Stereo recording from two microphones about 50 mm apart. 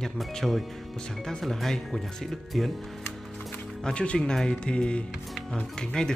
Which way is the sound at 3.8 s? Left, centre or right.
Left.